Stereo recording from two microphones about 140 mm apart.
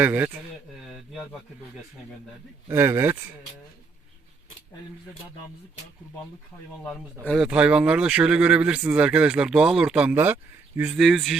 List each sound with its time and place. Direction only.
0.0 s speech: 15° right (ahead or behind)
1.1 s speech: centre (ahead or behind)
2.6 s speech: 20° right (ahead or behind)
7.3 s speech: 5° right (ahead or behind)
10.9 s speech: centre (ahead or behind)